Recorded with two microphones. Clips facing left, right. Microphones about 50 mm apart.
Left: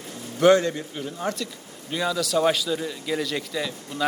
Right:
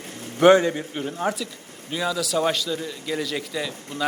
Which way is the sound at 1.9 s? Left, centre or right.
Centre.